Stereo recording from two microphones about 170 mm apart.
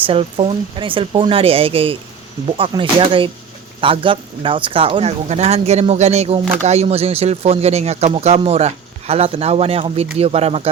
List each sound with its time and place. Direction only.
0.0 s speech: 35° right (ahead or behind)